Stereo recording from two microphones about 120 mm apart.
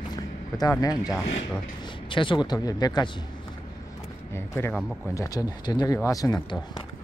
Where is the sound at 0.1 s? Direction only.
30° left (ahead or behind).